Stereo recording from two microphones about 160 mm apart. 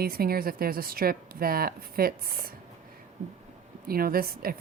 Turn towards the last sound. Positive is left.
turn(degrees=-65)  # may be behind; listen again after turning